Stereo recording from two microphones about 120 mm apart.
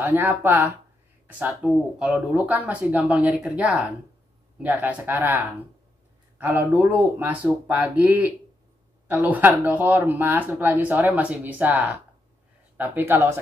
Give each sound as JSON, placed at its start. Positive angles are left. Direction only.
{"t": 0.0, "sound": "speech", "side_deg": -20}